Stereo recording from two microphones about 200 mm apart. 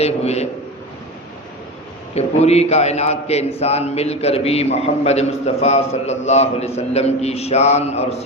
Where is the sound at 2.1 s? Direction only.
30° left (ahead or behind).